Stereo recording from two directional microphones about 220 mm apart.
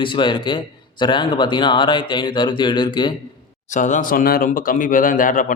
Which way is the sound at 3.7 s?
35° left (ahead or behind).